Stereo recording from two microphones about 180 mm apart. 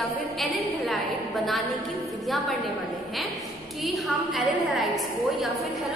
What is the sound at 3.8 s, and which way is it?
A woman's voice, centre (ahead or behind).